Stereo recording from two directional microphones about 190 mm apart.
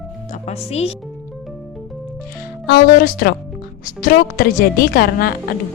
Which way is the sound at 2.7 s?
50° left (ahead or behind).